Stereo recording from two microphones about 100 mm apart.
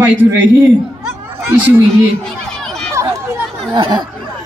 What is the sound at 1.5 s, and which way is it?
Speech, 20° right (ahead or behind).